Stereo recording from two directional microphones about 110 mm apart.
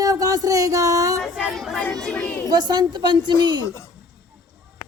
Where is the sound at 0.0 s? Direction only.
35° right (ahead or behind).